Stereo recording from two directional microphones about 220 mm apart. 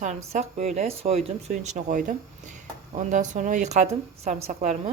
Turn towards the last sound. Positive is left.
turn(degrees=-30)  # may be behind; listen again after turning